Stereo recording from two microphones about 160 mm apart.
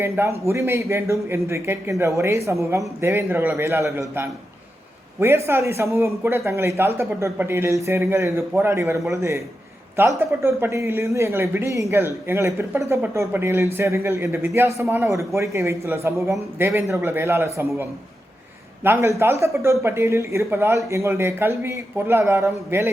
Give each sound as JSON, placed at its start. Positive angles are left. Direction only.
{"t": 0.0, "sound": "a man's voice", "side_deg": -15}
{"t": 18.8, "sound": "a man's voice", "side_deg": -15}